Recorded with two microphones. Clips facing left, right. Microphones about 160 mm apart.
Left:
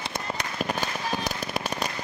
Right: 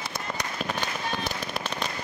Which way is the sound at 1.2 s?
40° left (ahead or behind).